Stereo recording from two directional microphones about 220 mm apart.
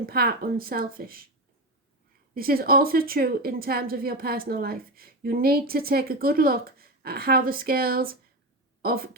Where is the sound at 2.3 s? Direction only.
40° right (ahead or behind).